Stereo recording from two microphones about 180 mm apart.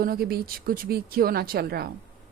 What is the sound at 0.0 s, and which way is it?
Speech, 55° right (ahead or behind).